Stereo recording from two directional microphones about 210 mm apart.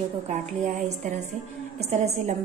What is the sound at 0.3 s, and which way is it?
A woman's voice, 35° right (ahead or behind).